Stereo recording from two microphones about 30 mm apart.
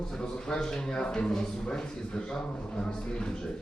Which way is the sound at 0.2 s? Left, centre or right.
Left.